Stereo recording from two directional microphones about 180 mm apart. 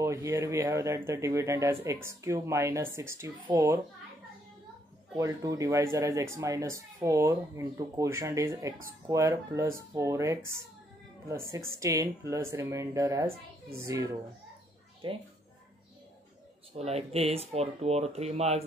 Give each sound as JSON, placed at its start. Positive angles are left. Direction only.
{"t": 0.0, "sound": "speech", "side_deg": -15}
{"t": 5.1, "sound": "speech", "side_deg": -20}
{"t": 11.7, "sound": "speech", "side_deg": -15}
{"t": 15.0, "sound": "speech", "side_deg": -30}
{"t": 16.7, "sound": "speech", "side_deg": -35}